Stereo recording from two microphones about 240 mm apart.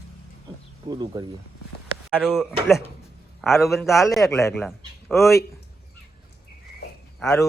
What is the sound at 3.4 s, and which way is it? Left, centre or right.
A man's voice, centre.